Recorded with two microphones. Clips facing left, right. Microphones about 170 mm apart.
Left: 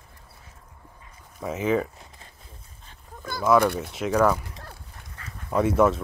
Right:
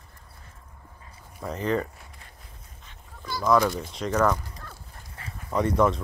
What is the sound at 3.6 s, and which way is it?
Speech, 65° left (ahead or behind).